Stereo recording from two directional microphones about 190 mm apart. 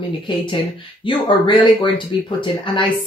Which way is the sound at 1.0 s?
25° left (ahead or behind).